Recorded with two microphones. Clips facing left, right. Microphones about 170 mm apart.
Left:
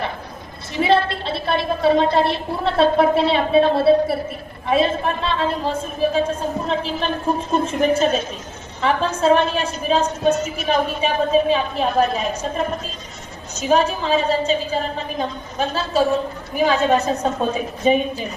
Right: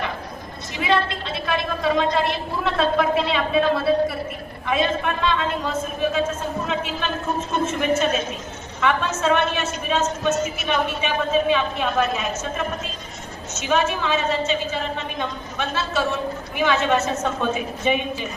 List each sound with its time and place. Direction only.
0.8 s a woman's voice: 30° left (ahead or behind)
13.6 s a woman's voice: 35° left (ahead or behind)